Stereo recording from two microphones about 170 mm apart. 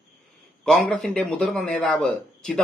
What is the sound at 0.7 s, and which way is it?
Speech, 5° left (ahead or behind).